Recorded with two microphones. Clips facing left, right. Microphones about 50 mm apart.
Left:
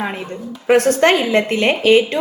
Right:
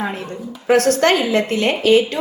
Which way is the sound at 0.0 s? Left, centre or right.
Centre.